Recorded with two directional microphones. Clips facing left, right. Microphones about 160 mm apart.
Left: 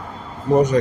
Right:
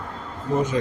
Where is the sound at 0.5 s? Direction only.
40° left (ahead or behind).